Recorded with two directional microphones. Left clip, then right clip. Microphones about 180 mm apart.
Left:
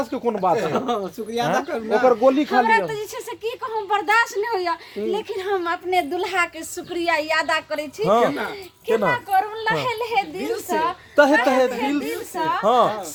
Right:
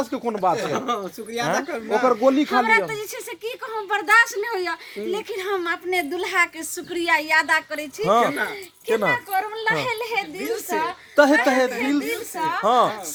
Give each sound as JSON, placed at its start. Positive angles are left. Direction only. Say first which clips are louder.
{"t": 0.0, "sound": "speech", "louder": "left 1 dB", "side_deg": -45}
{"t": 0.7, "sound": "speech", "louder": "left 2 dB", "side_deg": -5}
{"t": 2.0, "sound": "speech", "louder": "left 2 dB", "side_deg": -40}
{"t": 2.9, "sound": "a woman's voice", "louder": "left 1 dB", "side_deg": -5}
{"t": 8.0, "sound": "speech", "louder": "even", "side_deg": -50}
{"t": 9.3, "sound": "a woman's voice", "louder": "left 2 dB", "side_deg": -5}
{"t": 11.1, "sound": "a woman's voice", "louder": "even", "side_deg": -50}
{"t": 12.0, "sound": "speech", "louder": "left 1 dB", "side_deg": -5}
{"t": 12.6, "sound": "speech", "louder": "left 1 dB", "side_deg": -50}